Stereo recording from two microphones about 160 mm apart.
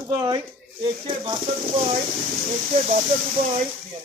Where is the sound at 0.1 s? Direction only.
25° right (ahead or behind).